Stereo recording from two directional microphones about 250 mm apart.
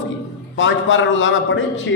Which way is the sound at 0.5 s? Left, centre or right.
Left.